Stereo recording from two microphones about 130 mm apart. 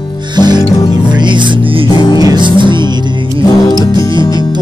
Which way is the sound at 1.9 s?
30° left (ahead or behind).